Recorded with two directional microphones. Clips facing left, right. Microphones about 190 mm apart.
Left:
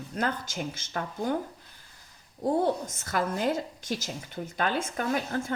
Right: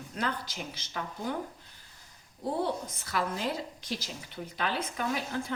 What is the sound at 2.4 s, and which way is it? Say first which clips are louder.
A woman's voice: left 5 dB; 45° left (ahead or behind).